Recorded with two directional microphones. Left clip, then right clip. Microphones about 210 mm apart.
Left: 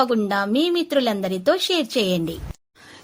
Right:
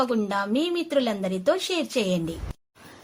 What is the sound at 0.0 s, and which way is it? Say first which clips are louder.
Speech: left 5 dB; 25° left (ahead or behind).